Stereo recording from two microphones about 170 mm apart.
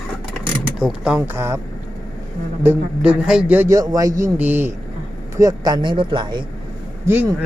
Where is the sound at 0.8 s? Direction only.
5° right (ahead or behind).